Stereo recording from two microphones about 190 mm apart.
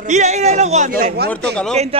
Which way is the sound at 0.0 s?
40° right (ahead or behind).